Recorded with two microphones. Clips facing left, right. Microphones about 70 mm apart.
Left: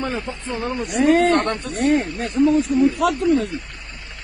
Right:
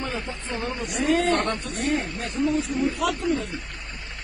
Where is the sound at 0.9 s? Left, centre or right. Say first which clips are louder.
Left 6 dB; left.